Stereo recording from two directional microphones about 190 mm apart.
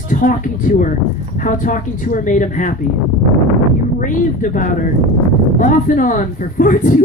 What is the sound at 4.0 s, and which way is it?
A woman's voice, 45° left (ahead or behind).